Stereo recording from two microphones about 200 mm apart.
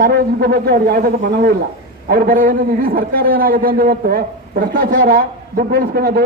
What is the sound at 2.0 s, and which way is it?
A man's voice, 50° right (ahead or behind).